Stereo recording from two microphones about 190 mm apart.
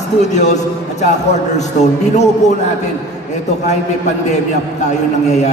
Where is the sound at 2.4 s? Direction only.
35° left (ahead or behind).